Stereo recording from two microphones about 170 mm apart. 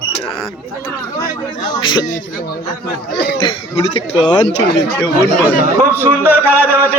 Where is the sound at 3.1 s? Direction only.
75° left (ahead or behind).